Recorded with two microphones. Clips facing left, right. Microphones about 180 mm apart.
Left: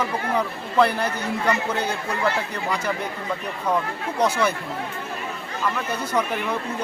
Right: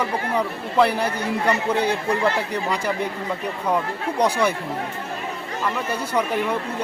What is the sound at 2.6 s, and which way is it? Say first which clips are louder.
Speech: left 1 dB; 10° right (ahead or behind).